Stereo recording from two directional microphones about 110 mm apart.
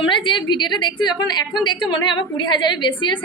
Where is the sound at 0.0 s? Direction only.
45° left (ahead or behind).